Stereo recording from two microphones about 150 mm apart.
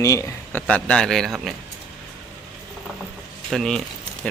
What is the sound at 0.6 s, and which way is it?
Speech, 5° left (ahead or behind).